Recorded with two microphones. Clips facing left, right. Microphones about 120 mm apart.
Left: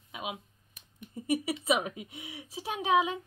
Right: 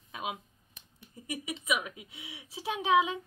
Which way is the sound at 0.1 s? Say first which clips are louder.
Right 1 dB; 20° left (ahead or behind).